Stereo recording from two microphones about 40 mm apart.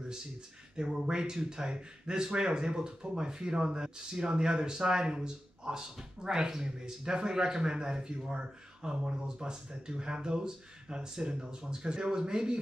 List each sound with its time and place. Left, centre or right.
0.7 s speech: right